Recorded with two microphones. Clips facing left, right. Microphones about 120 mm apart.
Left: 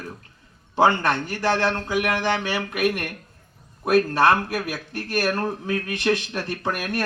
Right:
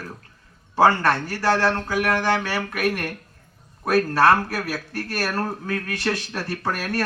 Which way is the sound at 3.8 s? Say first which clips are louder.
Left 1 dB; 20° left (ahead or behind).